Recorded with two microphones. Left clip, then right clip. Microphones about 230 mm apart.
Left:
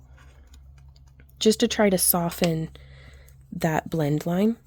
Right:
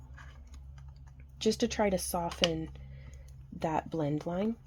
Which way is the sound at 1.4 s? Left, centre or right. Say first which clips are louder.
Left 9 dB; left.